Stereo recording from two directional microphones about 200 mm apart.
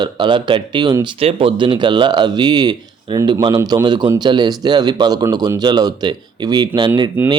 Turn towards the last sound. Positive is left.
turn(degrees=-20)  # may be behind; listen again after turning